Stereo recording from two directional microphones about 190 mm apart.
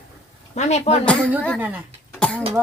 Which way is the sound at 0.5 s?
35° left (ahead or behind).